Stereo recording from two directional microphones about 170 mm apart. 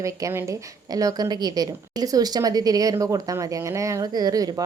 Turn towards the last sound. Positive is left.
turn(degrees=-20)  # may be behind; listen again after turning